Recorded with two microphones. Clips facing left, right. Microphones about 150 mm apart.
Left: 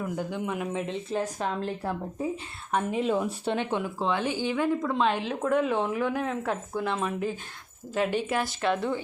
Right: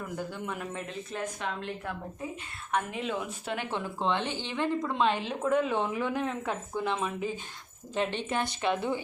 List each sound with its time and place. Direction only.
0.0 s a man's voice: 15° left (ahead or behind)
0.9 s a woman's voice: 35° left (ahead or behind); by 9.0 s centre (ahead or behind)